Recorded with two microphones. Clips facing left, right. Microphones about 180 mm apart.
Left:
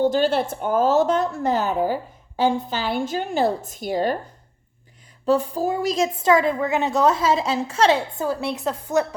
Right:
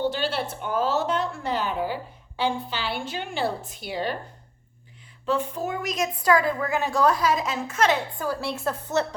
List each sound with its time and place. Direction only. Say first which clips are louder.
0.0 s a woman's voice: left 7 dB; 45° left (ahead or behind)
5.2 s a woman's voice: left 6 dB; 35° left (ahead or behind); by 9.0 s 15° left (ahead or behind)